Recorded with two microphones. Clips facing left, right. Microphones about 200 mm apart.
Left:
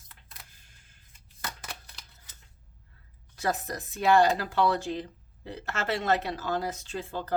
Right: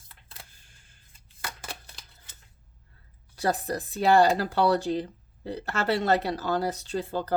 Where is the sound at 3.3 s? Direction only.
35° right (ahead or behind).